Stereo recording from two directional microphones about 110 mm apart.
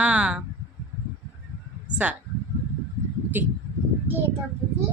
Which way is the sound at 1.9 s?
15° right (ahead or behind).